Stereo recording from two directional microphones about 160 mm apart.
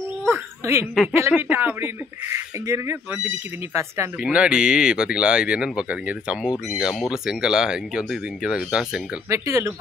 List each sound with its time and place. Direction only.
0.3 s a sound: 15° right (ahead or behind)
1.1 s speech: 15° right (ahead or behind)
4.2 s speech: 5° right (ahead or behind)
9.3 s speech: 15° right (ahead or behind)